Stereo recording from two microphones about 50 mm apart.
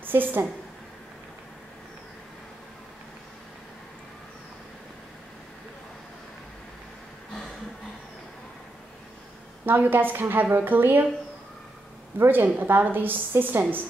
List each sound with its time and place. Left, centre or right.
0.0 s a woman's voice: right
9.7 s a woman's voice: right
12.2 s a woman's voice: right